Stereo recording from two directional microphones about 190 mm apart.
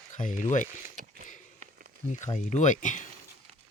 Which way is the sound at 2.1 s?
40° left (ahead or behind).